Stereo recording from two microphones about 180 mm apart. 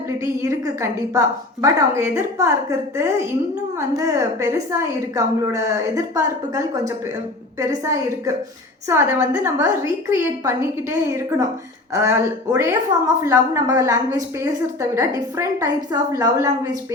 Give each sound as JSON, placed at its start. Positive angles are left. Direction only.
{"t": 0.2, "sound": "a woman's voice", "side_deg": -15}